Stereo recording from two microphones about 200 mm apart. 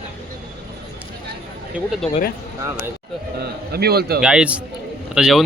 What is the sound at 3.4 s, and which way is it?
Speech, 50° right (ahead or behind).